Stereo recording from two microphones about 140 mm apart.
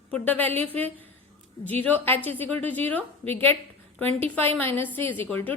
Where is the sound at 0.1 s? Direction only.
10° left (ahead or behind).